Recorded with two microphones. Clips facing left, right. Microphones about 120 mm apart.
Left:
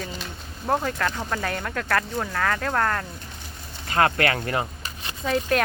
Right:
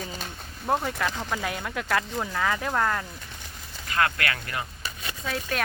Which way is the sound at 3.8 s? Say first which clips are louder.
Left 5 dB; 30° left (ahead or behind).